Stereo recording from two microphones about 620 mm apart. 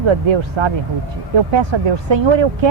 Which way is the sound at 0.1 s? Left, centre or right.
Right.